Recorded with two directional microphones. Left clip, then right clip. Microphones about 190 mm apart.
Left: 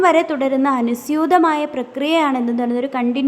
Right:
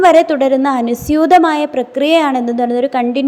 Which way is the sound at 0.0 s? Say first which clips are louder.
Right 6 dB; 15° right (ahead or behind).